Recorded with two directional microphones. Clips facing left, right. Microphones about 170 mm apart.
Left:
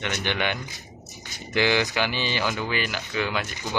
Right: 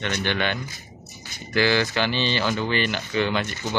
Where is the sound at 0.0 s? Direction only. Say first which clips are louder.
Right 2 dB; 15° left (ahead or behind).